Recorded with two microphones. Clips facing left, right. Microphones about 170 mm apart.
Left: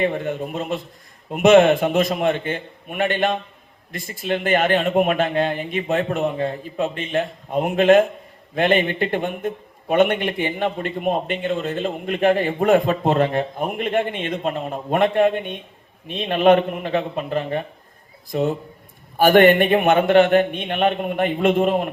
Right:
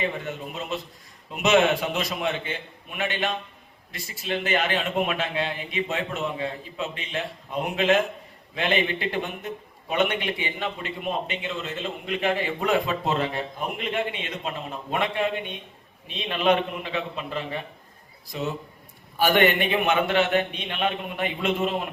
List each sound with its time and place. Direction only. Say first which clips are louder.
0.0 s a man's voice: left 8 dB; 50° left (ahead or behind)